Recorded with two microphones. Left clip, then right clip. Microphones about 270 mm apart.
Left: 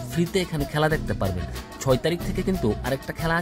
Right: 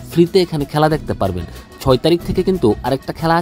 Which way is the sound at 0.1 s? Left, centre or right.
Centre.